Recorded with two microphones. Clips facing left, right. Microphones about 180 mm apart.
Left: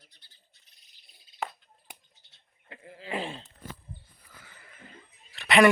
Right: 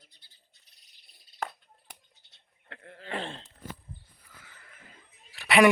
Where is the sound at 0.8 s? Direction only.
Centre (ahead or behind).